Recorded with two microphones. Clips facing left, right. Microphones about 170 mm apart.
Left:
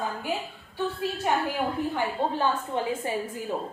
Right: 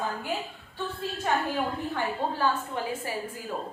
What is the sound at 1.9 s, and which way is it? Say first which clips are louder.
A woman's voice: left 2 dB; 20° left (ahead or behind).